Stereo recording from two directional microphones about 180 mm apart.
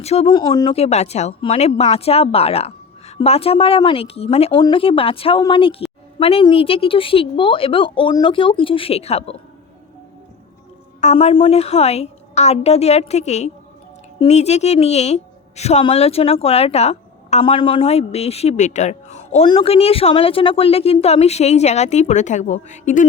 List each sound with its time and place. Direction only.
0.0 s a woman's voice: 35° left (ahead or behind)
0.3 s a woman's voice: 25° left (ahead or behind)
11.0 s a woman's voice: 35° left (ahead or behind)